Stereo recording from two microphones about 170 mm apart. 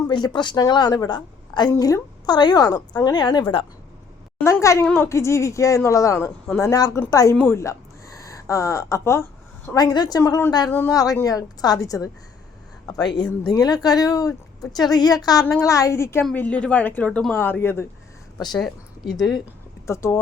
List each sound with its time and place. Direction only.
0.1 s a woman's voice: 25° left (ahead or behind)
4.4 s a woman's voice: 20° left (ahead or behind)
18.5 s a woman's voice: centre (ahead or behind)
19.9 s speech: 15° left (ahead or behind)